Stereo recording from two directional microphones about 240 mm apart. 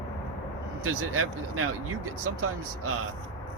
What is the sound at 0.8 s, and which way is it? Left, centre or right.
Speech, right.